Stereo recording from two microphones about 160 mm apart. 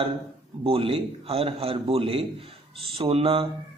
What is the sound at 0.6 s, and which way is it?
Speech, 35° right (ahead or behind).